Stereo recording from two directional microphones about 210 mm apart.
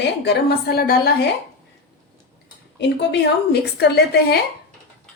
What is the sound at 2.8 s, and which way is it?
A woman's voice, 55° left (ahead or behind).